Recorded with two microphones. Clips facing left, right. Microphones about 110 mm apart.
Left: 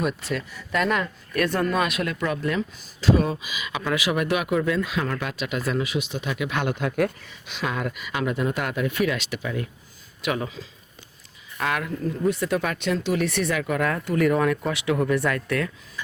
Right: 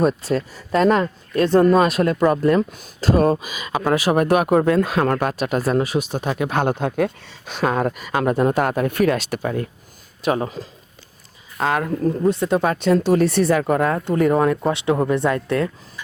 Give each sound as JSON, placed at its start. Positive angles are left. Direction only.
{"t": 0.0, "sound": "speech", "side_deg": -35}
{"t": 7.4, "sound": "speech", "side_deg": -40}
{"t": 12.3, "sound": "speech", "side_deg": -30}